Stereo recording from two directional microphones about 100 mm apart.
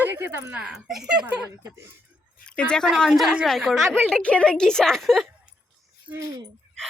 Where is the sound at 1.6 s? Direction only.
30° right (ahead or behind).